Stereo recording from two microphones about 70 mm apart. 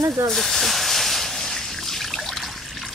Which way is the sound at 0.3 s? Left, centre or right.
Centre.